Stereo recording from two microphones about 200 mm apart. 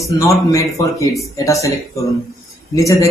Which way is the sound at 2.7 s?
15° left (ahead or behind).